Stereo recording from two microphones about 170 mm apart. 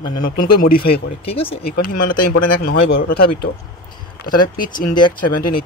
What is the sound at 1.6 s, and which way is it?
Speech, 60° left (ahead or behind).